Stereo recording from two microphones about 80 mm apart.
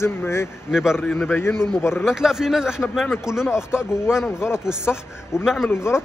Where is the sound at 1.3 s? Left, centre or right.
Left.